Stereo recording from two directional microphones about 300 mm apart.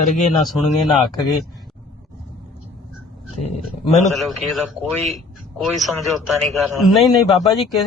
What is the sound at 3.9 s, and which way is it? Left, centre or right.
A man's voice, centre.